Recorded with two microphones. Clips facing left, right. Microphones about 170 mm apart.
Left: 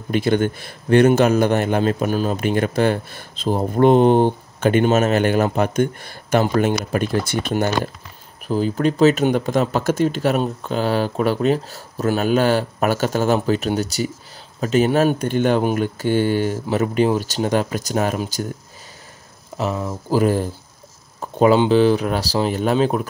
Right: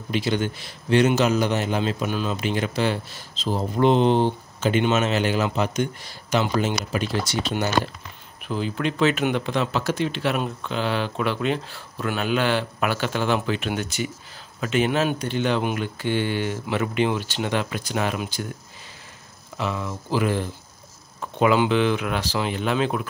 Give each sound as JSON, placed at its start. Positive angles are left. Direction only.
{"t": 0.1, "sound": "a man's voice", "side_deg": 50}
{"t": 19.5, "sound": "speech", "side_deg": 35}